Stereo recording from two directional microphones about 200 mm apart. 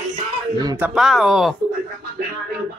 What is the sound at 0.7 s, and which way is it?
Speech, 5° right (ahead or behind).